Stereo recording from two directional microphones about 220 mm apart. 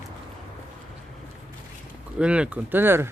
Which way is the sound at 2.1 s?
5° right (ahead or behind).